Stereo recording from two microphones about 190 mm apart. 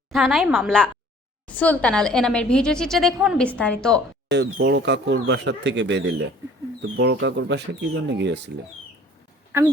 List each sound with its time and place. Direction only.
0.1 s a woman's voice: centre (ahead or behind)
4.3 s speech: 65° right (ahead or behind)